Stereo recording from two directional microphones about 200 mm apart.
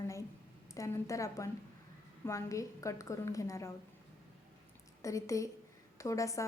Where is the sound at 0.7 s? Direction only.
15° left (ahead or behind).